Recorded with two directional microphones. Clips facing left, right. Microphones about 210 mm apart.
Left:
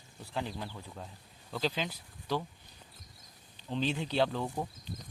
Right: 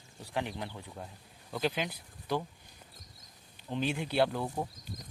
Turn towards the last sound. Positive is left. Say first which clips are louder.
# even
turn(degrees=-10)  # may be behind; listen again after turning